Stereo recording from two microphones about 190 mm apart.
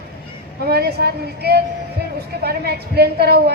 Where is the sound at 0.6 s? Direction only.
55° right (ahead or behind).